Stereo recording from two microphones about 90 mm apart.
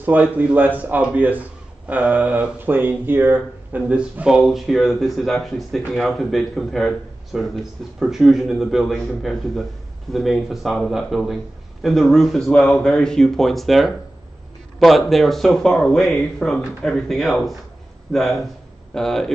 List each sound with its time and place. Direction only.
0.0 s a man's voice: 20° right (ahead or behind); by 19.3 s 5° left (ahead or behind)